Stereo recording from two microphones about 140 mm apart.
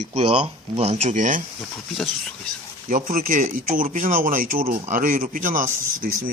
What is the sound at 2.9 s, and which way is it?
Speech, 75° right (ahead or behind).